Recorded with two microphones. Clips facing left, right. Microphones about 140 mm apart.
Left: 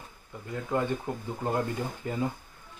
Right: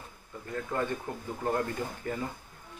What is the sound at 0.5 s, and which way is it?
Speech, 15° left (ahead or behind).